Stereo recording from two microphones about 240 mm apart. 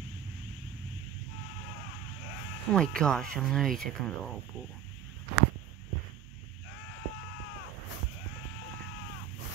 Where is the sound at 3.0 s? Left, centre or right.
Centre.